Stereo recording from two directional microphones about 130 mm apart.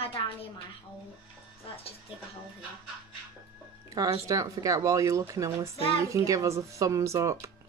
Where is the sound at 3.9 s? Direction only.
25° right (ahead or behind).